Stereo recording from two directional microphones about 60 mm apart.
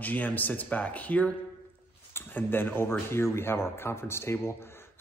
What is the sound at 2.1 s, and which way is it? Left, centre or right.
A man's voice, left.